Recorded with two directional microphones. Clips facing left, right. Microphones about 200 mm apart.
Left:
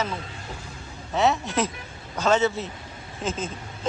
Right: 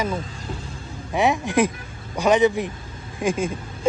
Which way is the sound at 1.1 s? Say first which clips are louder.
Right 2 dB; 15° right (ahead or behind).